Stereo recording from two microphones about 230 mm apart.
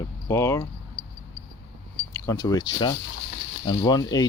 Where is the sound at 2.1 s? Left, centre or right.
Centre.